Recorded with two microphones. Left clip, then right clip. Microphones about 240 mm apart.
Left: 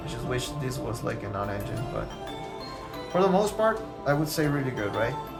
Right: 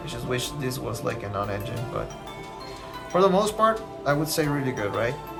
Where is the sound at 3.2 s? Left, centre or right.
Centre.